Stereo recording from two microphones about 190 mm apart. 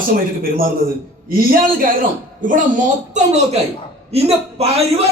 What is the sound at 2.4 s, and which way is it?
A man's voice, 45° right (ahead or behind).